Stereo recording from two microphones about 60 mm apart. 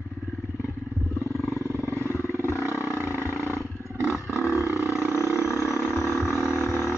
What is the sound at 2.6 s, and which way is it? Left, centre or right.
Roar, right.